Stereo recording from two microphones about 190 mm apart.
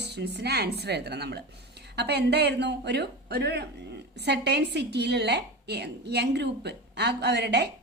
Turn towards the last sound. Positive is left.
turn(degrees=-60)  # may be behind; listen again after turning